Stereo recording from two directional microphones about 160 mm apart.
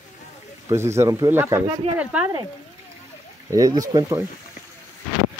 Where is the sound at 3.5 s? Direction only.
20° right (ahead or behind).